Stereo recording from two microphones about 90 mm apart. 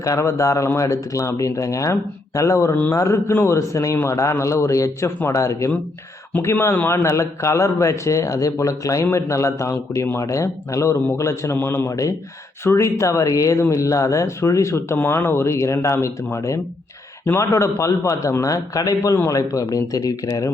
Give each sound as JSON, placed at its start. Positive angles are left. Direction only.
{"t": 0.0, "sound": "a man's voice", "side_deg": 35}